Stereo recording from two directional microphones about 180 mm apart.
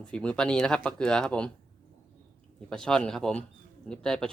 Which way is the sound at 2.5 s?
5° left (ahead or behind).